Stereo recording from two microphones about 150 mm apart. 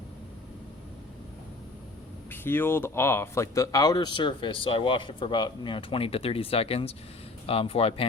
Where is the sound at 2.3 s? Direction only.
15° left (ahead or behind).